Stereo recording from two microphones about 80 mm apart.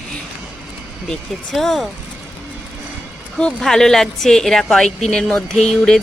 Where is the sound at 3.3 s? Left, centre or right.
Centre.